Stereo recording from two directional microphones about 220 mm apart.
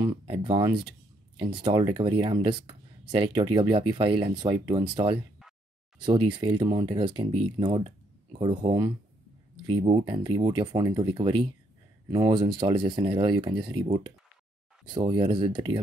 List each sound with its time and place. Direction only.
0.0 s speech: 20° right (ahead or behind)